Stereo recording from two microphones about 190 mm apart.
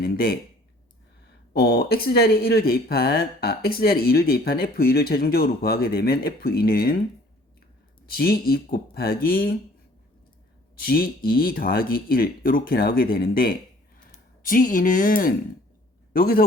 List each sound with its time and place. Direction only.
0.0 s speech: 55° left (ahead or behind)
1.5 s speech: 55° left (ahead or behind)
8.1 s speech: 50° left (ahead or behind)
10.8 s speech: 50° left (ahead or behind)